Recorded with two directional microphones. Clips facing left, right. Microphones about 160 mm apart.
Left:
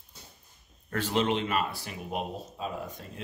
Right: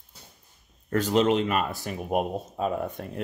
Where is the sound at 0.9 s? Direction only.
40° right (ahead or behind).